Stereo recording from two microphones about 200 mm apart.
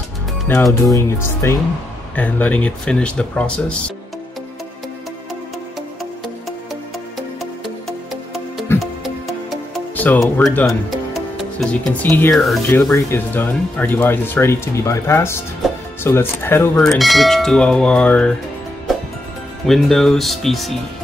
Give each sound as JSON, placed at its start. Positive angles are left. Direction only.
{"t": 0.5, "sound": "speech", "side_deg": 10}
{"t": 8.1, "sound": "music", "side_deg": 0}
{"t": 9.0, "sound": "speech", "side_deg": 5}
{"t": 19.6, "sound": "speech", "side_deg": 0}